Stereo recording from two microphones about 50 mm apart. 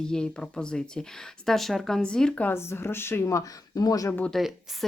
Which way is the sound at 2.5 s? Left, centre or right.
Left.